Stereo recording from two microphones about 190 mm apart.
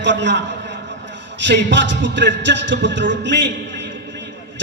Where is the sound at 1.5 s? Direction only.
70° right (ahead or behind).